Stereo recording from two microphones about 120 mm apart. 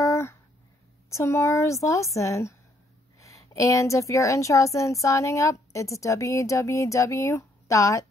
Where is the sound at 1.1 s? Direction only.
25° left (ahead or behind).